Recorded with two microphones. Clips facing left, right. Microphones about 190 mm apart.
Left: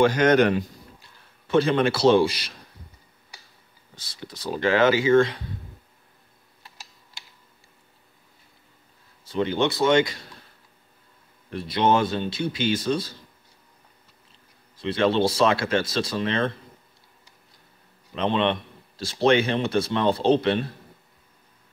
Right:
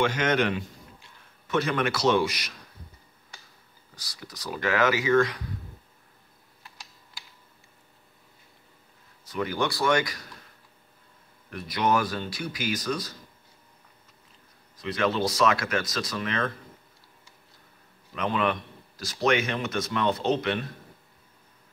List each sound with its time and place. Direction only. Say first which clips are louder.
0.0 s a man's voice: left 7 dB; 40° left (ahead or behind)
1.5 s speech: left 6 dB; 30° left (ahead or behind)
3.9 s speech: left 5 dB; 25° left (ahead or behind)
9.2 s speech: left 5 dB; 25° left (ahead or behind)
11.5 s speech: left 4 dB; 25° left (ahead or behind)
14.8 s speech: left 5 dB; 30° left (ahead or behind)
18.1 s a man's voice: left 4 dB; 25° left (ahead or behind)